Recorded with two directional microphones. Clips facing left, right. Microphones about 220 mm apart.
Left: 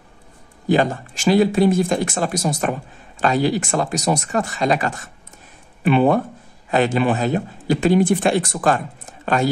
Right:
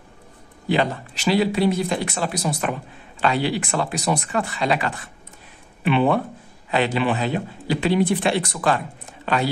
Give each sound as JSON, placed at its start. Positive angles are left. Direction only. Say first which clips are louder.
{"t": 0.7, "sound": "speech", "louder": "left 4 dB", "side_deg": 45}